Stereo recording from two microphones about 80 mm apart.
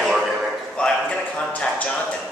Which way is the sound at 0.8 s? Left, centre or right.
Centre.